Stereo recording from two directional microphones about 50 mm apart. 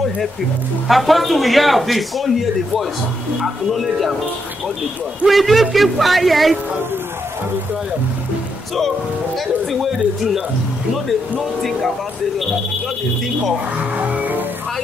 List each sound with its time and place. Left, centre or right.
0.8 s a man's voice: centre
5.2 s a man's voice: centre
9.7 s a man's voice: centre
13.9 s music: right